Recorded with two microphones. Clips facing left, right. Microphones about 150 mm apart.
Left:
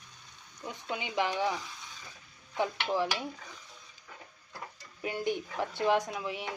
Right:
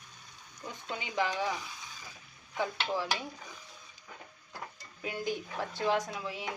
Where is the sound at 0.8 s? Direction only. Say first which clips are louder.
Left 1 dB; 20° left (ahead or behind).